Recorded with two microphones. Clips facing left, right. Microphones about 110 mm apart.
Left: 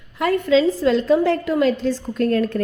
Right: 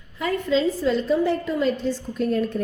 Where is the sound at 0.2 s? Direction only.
70° left (ahead or behind).